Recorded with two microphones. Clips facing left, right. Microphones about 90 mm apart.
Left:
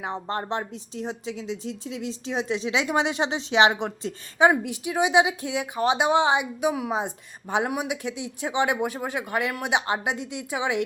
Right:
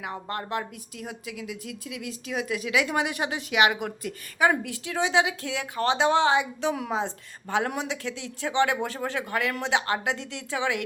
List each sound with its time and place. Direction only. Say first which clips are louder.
0.0 s a woman's voice: left 4 dB; 25° left (ahead or behind)